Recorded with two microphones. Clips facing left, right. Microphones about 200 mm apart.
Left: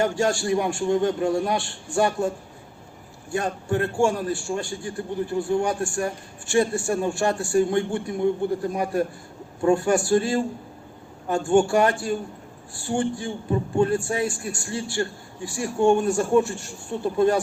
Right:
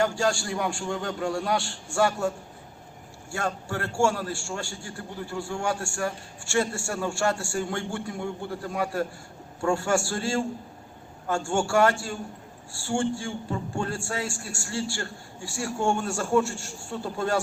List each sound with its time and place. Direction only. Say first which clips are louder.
0.0 s a man's voice: left 3 dB; 20° left (ahead or behind)
3.3 s a man's voice: left 6 dB; 20° left (ahead or behind)